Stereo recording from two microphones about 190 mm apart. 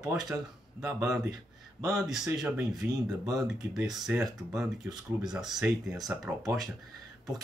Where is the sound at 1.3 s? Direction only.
20° right (ahead or behind).